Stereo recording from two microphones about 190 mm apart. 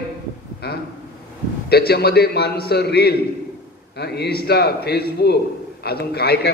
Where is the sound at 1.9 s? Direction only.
55° left (ahead or behind).